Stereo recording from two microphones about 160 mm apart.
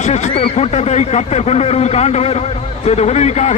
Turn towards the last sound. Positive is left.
turn(degrees=45)  # may be behind; listen again after turning